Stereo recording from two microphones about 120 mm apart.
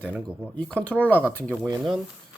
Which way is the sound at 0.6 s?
10° left (ahead or behind).